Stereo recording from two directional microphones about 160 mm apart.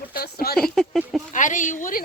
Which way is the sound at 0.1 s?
75° left (ahead or behind).